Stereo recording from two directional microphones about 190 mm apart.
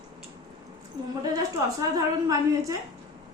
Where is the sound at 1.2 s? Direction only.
20° right (ahead or behind).